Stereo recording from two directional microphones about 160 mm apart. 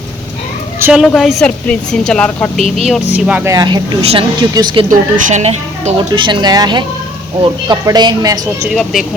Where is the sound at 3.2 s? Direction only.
10° right (ahead or behind).